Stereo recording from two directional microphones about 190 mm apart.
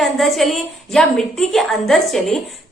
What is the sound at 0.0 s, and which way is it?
A woman's voice, centre (ahead or behind).